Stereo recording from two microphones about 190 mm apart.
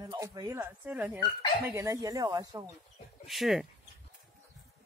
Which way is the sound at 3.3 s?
Centre (ahead or behind).